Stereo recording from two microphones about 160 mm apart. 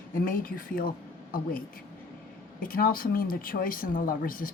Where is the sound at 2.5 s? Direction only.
60° left (ahead or behind).